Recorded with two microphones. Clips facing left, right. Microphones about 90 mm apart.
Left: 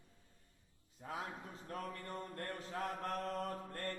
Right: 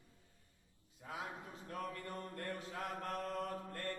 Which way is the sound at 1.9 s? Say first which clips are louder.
Even; 35° left (ahead or behind).